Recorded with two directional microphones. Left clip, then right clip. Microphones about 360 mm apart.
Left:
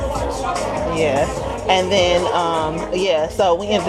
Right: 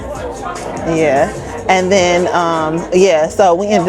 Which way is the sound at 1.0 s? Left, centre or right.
Right.